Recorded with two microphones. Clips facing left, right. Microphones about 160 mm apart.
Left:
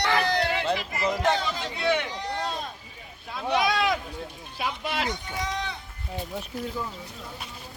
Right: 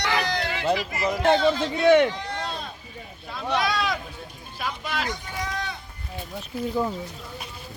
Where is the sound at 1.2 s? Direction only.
40° right (ahead or behind).